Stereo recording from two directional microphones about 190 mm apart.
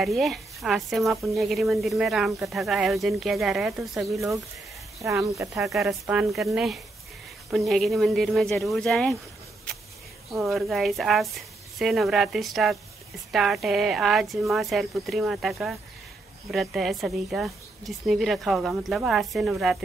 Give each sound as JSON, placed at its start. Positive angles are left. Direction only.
{"t": 0.0, "sound": "speech", "side_deg": 0}
{"t": 5.0, "sound": "speech", "side_deg": -15}
{"t": 5.7, "sound": "speech", "side_deg": 0}
{"t": 10.3, "sound": "speech", "side_deg": 0}